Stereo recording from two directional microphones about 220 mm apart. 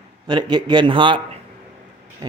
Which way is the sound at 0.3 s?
20° right (ahead or behind).